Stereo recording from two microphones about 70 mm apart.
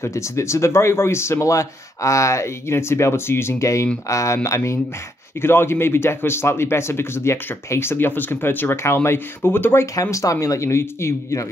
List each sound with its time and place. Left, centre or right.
0.0 s speech: left
10.1 s speech: left